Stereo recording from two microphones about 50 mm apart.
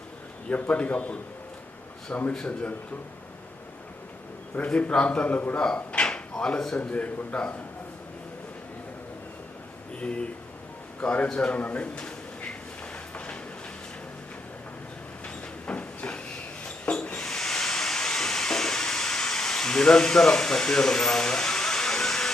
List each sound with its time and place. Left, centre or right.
0.5 s a man's voice: left
2.1 s a man's voice: left
4.5 s a man's voice: left
5.7 s a sound: left
6.3 s speech: centre
6.7 s a man's voice: left
10.0 s a man's voice: left
11.6 s a sound: left
15.6 s train: left
16.6 s a sound: left
17.2 s steam: centre